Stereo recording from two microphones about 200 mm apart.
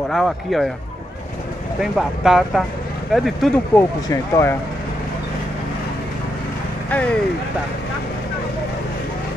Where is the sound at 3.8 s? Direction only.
15° left (ahead or behind).